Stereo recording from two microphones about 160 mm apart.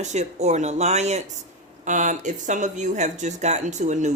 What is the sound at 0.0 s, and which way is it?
Speech, 45° right (ahead or behind).